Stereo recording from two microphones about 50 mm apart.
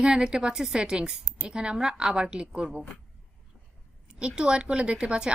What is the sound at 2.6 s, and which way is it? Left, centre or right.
Speech, centre.